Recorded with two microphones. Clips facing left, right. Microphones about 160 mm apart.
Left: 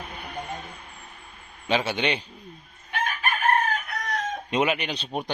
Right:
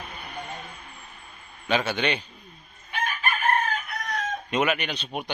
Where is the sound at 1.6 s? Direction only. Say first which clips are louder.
Even; 30° left (ahead or behind).